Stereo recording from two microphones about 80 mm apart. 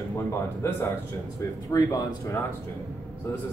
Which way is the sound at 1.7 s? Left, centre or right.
Left.